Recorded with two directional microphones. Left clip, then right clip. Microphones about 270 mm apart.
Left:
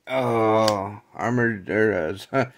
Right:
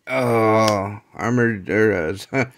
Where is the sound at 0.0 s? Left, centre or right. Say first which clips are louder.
Right 3 dB; centre.